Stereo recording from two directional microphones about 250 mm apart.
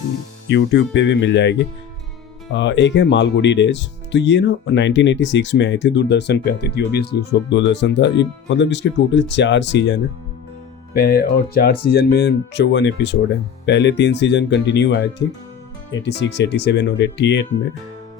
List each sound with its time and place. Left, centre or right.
0.4 s speech: left